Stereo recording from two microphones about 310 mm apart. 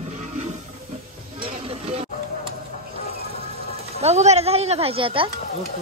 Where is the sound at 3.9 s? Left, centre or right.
Right.